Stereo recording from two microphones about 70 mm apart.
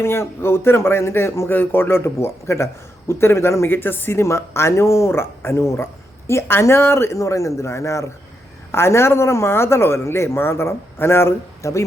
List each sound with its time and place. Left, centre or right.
0.0 s speech: left